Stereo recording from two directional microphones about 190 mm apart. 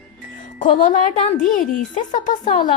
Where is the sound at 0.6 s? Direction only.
40° left (ahead or behind).